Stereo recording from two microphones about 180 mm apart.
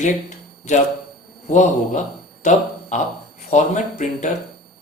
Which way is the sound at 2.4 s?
40° left (ahead or behind).